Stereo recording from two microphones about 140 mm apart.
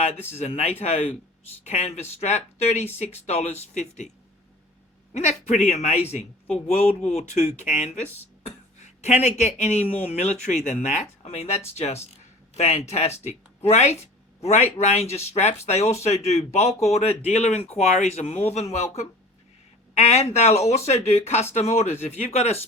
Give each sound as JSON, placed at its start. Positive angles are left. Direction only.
{"t": 0.0, "sound": "speech", "side_deg": 50}
{"t": 5.1, "sound": "speech", "side_deg": 55}
{"t": 8.4, "sound": "a sound", "side_deg": 55}
{"t": 9.4, "sound": "speech", "side_deg": 55}
{"t": 11.2, "sound": "speech", "side_deg": 50}